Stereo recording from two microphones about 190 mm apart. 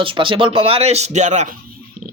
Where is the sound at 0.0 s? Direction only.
25° right (ahead or behind).